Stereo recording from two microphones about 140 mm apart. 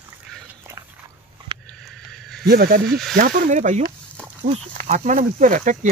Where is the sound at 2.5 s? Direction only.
90° right.